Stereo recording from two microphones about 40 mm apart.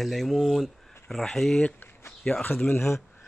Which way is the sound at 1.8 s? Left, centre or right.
Left.